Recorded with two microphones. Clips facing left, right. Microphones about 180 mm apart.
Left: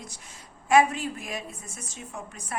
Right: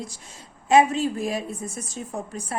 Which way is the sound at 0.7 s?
25° right (ahead or behind).